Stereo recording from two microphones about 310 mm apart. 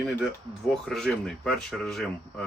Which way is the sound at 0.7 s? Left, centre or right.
Centre.